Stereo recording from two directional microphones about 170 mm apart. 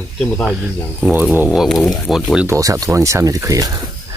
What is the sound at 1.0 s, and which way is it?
Speech, 10° right (ahead or behind).